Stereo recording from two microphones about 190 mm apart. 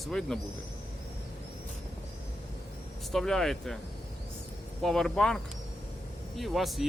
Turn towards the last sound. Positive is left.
turn(degrees=0)  # may be behind; listen again after turning